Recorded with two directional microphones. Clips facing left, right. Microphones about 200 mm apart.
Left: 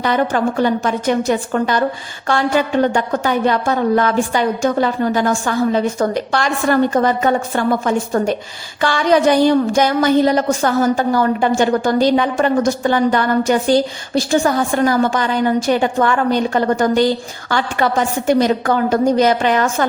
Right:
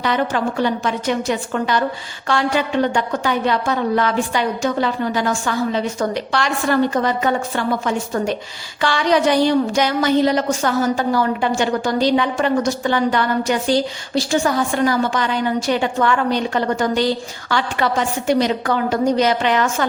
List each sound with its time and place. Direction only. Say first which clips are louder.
0.0 s a woman's voice: left 3 dB; 45° left (ahead or behind)